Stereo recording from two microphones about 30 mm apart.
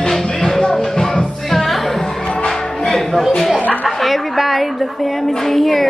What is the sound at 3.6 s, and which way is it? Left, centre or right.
Chuckle, left.